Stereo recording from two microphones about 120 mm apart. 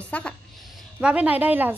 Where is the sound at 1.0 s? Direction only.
10° right (ahead or behind).